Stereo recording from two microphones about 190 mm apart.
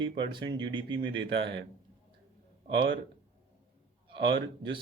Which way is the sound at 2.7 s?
70° right (ahead or behind).